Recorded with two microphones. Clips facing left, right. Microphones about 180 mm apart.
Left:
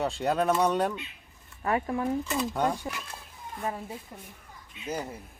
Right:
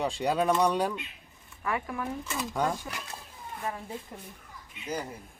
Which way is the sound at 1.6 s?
35° left (ahead or behind).